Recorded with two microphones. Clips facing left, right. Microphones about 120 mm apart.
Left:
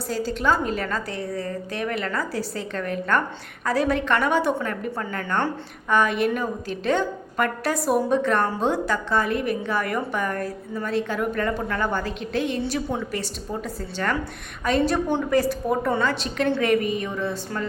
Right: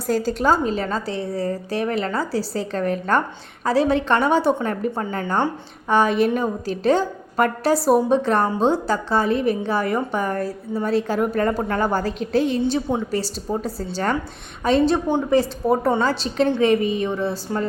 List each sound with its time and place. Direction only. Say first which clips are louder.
0.1 s a woman's voice: right 4 dB; 40° right (ahead or behind)